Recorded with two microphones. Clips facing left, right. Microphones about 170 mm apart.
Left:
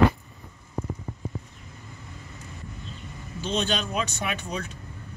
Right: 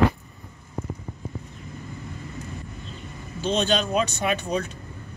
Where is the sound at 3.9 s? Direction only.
35° right (ahead or behind).